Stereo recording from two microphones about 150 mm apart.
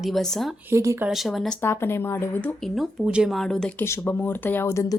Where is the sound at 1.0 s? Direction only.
Centre (ahead or behind).